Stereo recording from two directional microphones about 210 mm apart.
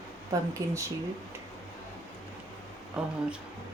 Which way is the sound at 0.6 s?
15° right (ahead or behind).